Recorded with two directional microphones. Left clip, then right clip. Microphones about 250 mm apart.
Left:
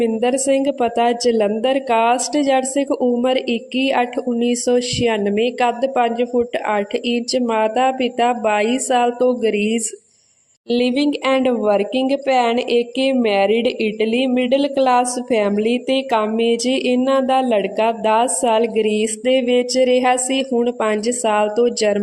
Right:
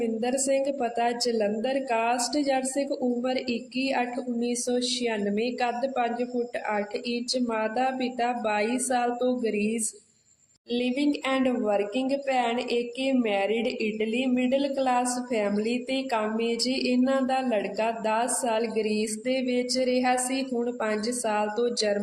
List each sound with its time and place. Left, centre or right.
0.0 s speech: left